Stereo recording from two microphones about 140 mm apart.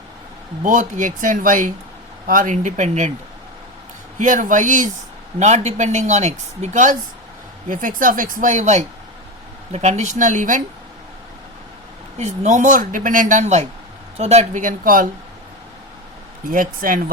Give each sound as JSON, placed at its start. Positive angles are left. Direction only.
{"t": 0.6, "sound": "speech", "side_deg": -65}
{"t": 4.2, "sound": "speech", "side_deg": -70}
{"t": 5.4, "sound": "speech", "side_deg": -55}
{"t": 7.7, "sound": "speech", "side_deg": -70}
{"t": 12.1, "sound": "speech", "side_deg": -55}
{"t": 16.5, "sound": "speech", "side_deg": -80}